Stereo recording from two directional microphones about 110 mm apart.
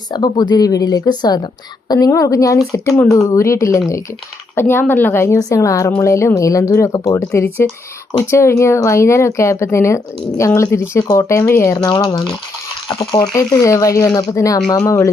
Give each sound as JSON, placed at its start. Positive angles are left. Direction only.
{"t": 0.1, "sound": "a woman's voice", "side_deg": 40}
{"t": 11.8, "sound": "speech", "side_deg": 45}
{"t": 13.1, "sound": "a woman's voice", "side_deg": 30}